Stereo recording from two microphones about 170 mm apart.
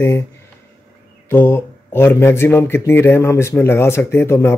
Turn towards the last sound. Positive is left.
turn(degrees=15)  # may be behind; listen again after turning